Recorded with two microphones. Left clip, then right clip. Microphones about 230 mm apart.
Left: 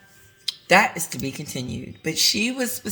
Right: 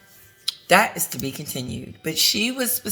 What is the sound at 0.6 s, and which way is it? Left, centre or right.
Speech, centre.